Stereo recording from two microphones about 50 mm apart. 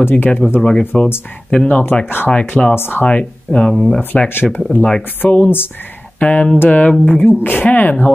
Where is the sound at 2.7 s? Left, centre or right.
Left.